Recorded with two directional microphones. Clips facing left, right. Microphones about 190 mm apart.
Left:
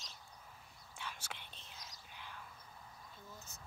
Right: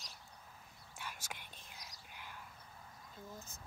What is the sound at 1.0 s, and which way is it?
Whispering, 10° right (ahead or behind).